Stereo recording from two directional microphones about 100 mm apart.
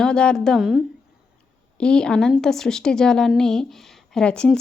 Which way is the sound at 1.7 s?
10° left (ahead or behind).